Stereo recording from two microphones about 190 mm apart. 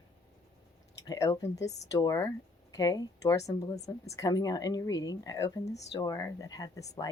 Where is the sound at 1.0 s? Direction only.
20° left (ahead or behind).